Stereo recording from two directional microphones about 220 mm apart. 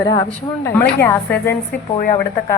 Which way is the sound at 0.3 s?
10° left (ahead or behind).